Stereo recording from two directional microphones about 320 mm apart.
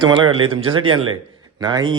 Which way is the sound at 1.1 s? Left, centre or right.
Centre.